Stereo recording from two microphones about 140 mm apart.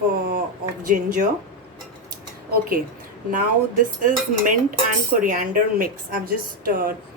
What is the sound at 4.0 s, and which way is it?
Speech, 70° right (ahead or behind).